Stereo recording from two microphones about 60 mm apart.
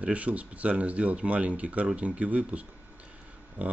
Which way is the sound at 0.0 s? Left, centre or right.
Right.